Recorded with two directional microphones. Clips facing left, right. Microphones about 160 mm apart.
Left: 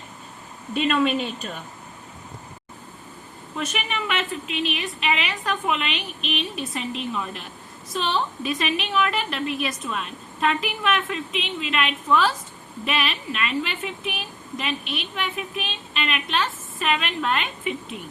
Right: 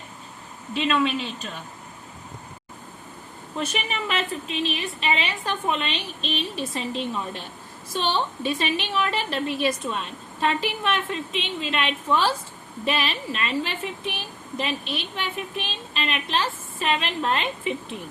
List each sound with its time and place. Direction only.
0.7 s speech: 50° left (ahead or behind)
3.6 s a woman's voice: 30° right (ahead or behind)